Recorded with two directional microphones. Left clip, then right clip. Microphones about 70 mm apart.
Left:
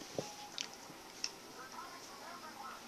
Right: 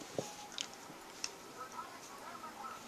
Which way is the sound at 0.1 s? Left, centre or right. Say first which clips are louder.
Right 1 dB; centre.